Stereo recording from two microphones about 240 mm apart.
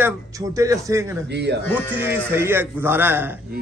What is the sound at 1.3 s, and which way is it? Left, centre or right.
Speech, right.